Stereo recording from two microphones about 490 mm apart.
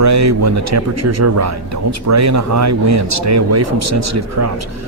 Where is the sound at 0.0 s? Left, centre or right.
Right.